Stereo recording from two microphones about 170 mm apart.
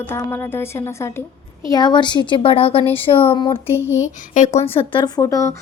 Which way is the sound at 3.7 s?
15° left (ahead or behind).